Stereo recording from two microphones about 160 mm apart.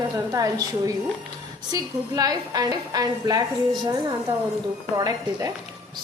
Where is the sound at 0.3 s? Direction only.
25° right (ahead or behind).